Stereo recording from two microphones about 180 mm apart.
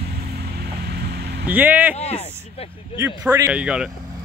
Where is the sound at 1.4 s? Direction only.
10° right (ahead or behind).